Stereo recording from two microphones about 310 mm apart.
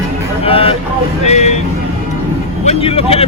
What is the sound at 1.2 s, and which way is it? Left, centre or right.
Music, left.